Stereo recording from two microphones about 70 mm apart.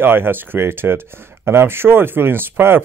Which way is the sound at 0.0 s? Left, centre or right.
Right.